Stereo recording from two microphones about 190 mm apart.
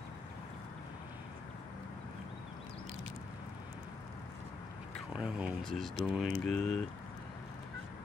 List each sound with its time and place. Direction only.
5.1 s speech: 5° right (ahead or behind)